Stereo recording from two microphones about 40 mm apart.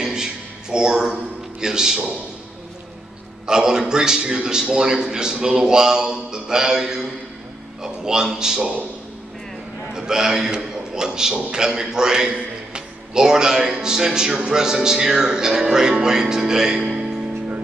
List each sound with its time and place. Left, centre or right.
0.0 s a sound: centre
1.6 s a man's voice: centre
3.4 s a man's voice: centre
9.9 s a man's voice: centre